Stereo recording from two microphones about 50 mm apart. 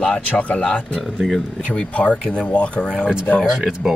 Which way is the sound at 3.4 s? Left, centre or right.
Centre.